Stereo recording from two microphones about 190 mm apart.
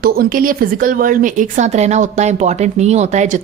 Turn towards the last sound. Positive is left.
turn(degrees=-40)  # may be behind; listen again after turning